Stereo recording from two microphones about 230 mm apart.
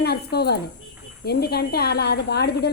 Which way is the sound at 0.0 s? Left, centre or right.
Left.